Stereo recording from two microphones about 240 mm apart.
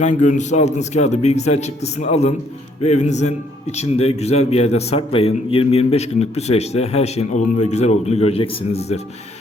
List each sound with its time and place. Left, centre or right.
0.0 s a man's voice: left